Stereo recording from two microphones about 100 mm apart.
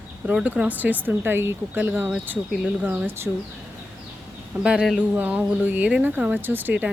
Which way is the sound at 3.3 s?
15° right (ahead or behind).